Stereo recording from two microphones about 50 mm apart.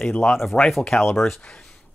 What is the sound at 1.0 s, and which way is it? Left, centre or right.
Speech, centre.